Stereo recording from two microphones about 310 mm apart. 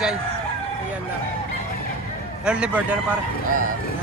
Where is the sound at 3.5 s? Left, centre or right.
Right.